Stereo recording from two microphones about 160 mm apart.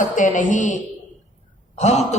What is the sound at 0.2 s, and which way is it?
Speech, 50° left (ahead or behind).